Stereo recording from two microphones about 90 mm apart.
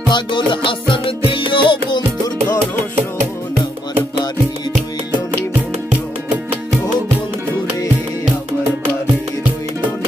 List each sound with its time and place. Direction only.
0.1 s music: 65° left (ahead or behind)